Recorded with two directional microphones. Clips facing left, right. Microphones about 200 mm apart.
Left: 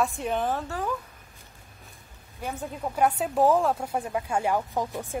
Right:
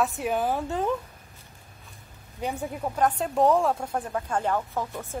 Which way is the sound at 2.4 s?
5° right (ahead or behind).